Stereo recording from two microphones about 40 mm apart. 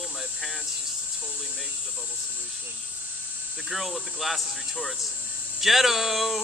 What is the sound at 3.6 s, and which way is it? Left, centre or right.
Speech, centre.